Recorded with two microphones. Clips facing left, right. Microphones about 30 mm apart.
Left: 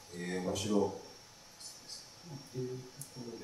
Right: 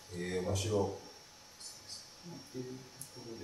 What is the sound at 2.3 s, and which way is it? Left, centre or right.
Music, centre.